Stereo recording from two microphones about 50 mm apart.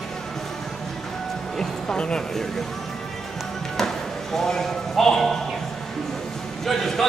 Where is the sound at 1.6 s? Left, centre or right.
Centre.